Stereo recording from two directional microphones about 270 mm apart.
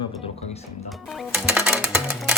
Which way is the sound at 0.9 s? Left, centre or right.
Centre.